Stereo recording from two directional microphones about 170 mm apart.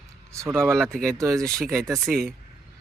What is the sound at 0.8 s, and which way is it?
Speech, 5° left (ahead or behind).